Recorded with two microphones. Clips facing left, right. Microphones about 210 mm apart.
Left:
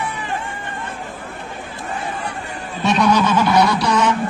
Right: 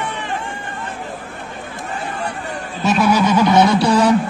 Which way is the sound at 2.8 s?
5° right (ahead or behind).